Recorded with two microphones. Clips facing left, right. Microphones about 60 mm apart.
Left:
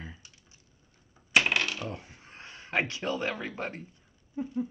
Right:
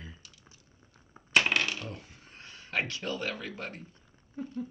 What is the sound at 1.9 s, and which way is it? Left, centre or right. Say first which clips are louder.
Speech: left 4 dB; left.